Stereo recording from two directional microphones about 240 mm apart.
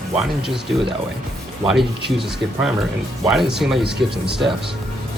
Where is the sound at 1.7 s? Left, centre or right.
Centre.